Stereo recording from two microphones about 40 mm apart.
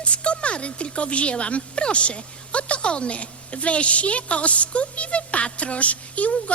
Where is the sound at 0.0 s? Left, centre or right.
Left.